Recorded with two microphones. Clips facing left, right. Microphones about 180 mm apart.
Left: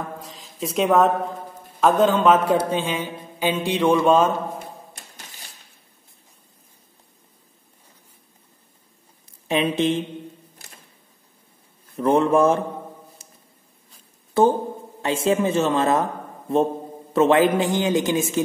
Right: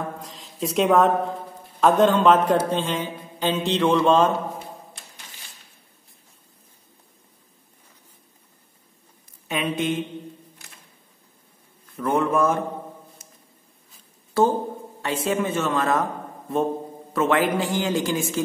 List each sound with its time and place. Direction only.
0.2 s a sound: centre (ahead or behind)
1.8 s a man's voice: centre (ahead or behind)
9.5 s a man's voice: 30° left (ahead or behind)
12.0 s a man's voice: 30° left (ahead or behind)
13.2 s a sound: 30° left (ahead or behind)
14.3 s a man's voice: 20° left (ahead or behind)